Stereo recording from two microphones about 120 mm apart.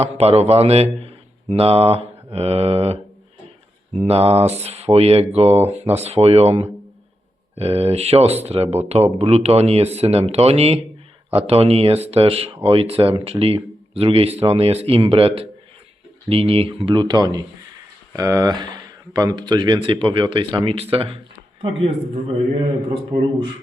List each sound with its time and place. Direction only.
0.0 s a man's voice: 60° right (ahead or behind)
16.9 s speech: 35° right (ahead or behind); by 22.2 s 55° right (ahead or behind)